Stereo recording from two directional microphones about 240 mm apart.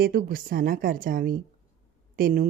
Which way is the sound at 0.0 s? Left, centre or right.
Right.